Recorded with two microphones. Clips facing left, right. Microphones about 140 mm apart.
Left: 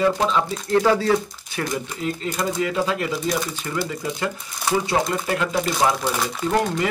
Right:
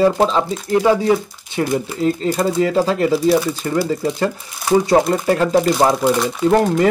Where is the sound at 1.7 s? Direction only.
30° right (ahead or behind).